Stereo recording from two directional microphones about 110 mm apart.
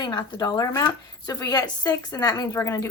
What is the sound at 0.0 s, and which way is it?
Speech, 40° left (ahead or behind).